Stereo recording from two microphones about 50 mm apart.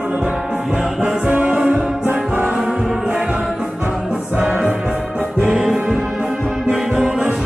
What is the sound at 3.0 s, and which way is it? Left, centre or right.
Music, right.